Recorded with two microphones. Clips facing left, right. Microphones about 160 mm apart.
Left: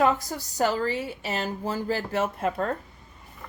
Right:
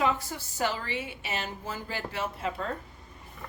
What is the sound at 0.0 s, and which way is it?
A woman's voice, 40° left (ahead or behind).